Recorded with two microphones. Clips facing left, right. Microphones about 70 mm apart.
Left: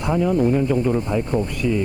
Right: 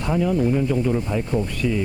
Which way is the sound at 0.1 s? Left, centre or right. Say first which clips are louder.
Left 2 dB; left.